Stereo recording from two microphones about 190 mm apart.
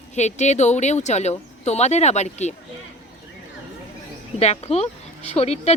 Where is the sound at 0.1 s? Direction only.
35° left (ahead or behind).